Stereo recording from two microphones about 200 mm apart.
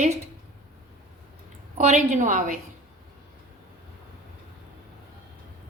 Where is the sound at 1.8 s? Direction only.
35° right (ahead or behind).